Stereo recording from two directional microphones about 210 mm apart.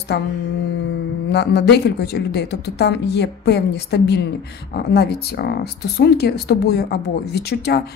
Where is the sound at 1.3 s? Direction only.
50° left (ahead or behind).